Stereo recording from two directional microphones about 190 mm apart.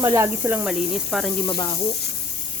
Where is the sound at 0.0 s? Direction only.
10° right (ahead or behind).